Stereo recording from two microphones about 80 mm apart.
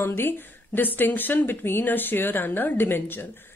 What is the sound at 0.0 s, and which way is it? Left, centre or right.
A woman's voice, left.